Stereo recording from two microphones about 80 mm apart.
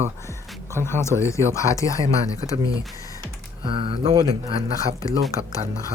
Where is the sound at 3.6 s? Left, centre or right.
Right.